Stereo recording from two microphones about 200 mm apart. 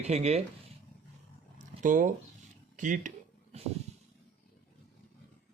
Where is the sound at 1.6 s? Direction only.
40° right (ahead or behind).